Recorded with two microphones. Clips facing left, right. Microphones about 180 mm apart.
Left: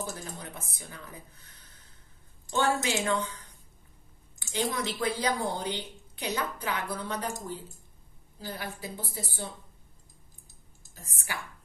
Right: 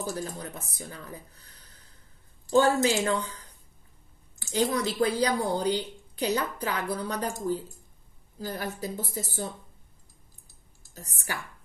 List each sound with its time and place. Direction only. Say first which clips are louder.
0.0 s speech: right 5 dB; 35° right (ahead or behind)
8.4 s speech: right 5 dB; 40° right (ahead or behind)
11.0 s speech: right 3 dB; 40° right (ahead or behind)